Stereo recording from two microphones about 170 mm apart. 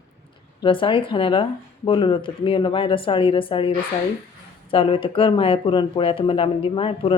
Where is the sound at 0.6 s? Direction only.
30° left (ahead or behind).